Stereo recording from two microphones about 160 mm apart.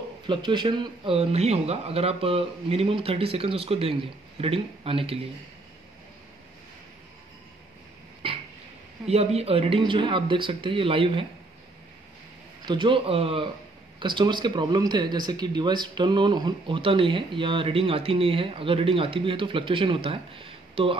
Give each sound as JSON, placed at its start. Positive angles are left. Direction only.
{"t": 0.3, "sound": "speech", "side_deg": -30}
{"t": 8.2, "sound": "a sound", "side_deg": -35}
{"t": 9.1, "sound": "speech", "side_deg": -40}
{"t": 12.6, "sound": "speech", "side_deg": -30}